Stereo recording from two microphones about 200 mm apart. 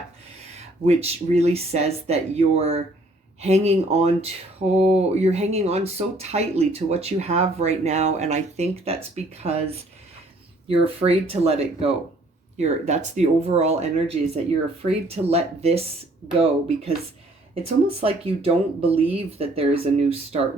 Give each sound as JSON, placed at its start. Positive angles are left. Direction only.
{"t": 0.5, "sound": "speech", "side_deg": -30}